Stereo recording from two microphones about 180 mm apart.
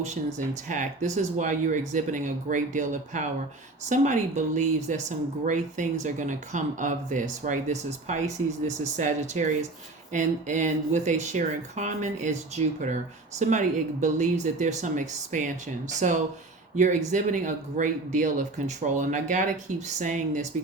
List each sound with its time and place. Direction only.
0.0 s speech: 40° right (ahead or behind)